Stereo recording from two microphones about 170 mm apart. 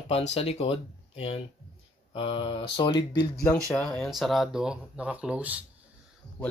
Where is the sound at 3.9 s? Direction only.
Centre (ahead or behind).